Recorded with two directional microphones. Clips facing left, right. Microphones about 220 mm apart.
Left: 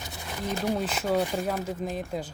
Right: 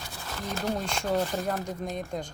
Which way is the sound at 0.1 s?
15° left (ahead or behind).